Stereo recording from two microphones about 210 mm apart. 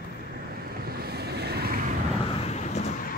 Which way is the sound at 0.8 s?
45° right (ahead or behind).